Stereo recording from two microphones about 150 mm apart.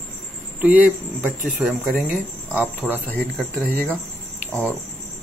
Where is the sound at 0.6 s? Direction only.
10° right (ahead or behind); by 3.0 s 5° left (ahead or behind).